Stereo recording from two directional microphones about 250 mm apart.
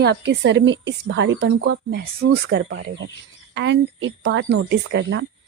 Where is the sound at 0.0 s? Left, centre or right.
Right.